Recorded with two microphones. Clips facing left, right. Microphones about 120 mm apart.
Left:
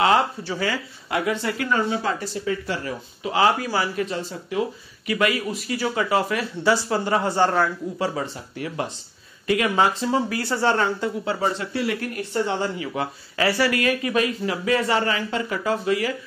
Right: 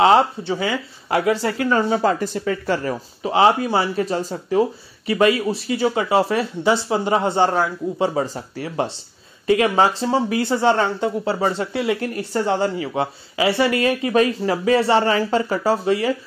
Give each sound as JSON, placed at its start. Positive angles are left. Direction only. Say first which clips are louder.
{"t": 0.0, "sound": "speech", "louder": "right 5 dB", "side_deg": -25}
{"t": 1.0, "sound": "speech", "louder": "right 5 dB", "side_deg": -35}
{"t": 2.0, "sound": "speech", "louder": "right 6 dB", "side_deg": -50}
{"t": 3.3, "sound": "speech", "louder": "right 4 dB", "side_deg": -25}